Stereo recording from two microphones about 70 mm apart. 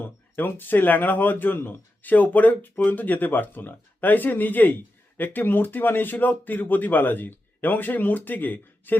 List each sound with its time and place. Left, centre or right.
0.0 s speech: left